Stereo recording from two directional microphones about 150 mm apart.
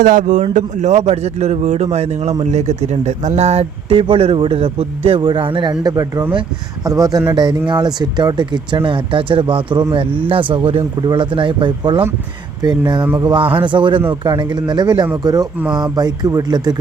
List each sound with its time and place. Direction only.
0.0 s a man's voice: 60° right (ahead or behind); by 16.7 s 25° right (ahead or behind)